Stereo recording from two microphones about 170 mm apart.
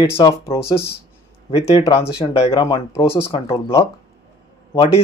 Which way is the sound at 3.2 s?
30° left (ahead or behind).